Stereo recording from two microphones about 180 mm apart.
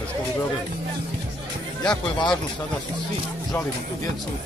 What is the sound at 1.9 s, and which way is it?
Speech, 25° left (ahead or behind).